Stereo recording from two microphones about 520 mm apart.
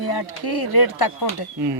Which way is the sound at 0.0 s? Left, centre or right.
Left.